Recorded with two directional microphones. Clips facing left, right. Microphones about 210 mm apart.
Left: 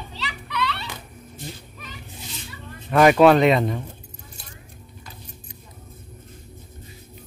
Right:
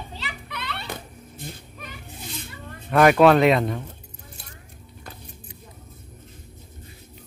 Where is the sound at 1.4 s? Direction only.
55° right (ahead or behind).